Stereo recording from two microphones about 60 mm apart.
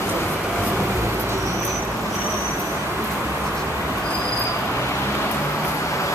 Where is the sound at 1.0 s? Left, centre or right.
Right.